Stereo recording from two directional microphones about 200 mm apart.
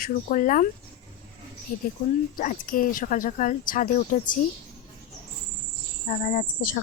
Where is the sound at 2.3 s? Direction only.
45° left (ahead or behind).